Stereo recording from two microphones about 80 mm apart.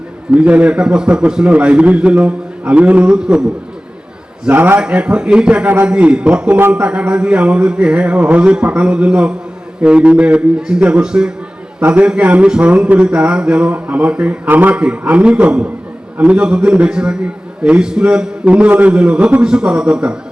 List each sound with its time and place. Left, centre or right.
0.3 s a man's voice: centre
4.4 s a man's voice: right
4.8 s a man's voice: centre
5.6 s a man's voice: right
5.9 s a man's voice: centre